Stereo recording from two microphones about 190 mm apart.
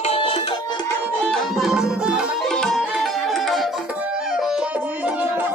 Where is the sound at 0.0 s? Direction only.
30° left (ahead or behind).